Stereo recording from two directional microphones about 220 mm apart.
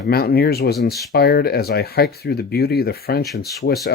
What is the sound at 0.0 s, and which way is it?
Speech, 45° left (ahead or behind).